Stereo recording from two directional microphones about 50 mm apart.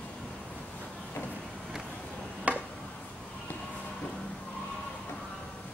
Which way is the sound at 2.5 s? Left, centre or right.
Right.